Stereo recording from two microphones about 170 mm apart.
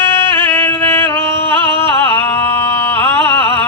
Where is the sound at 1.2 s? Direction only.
30° right (ahead or behind).